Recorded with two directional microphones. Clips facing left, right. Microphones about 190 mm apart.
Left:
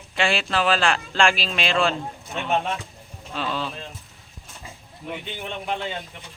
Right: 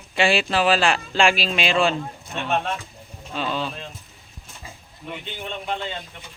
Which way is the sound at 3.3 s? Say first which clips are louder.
Right 2 dB; centre (ahead or behind).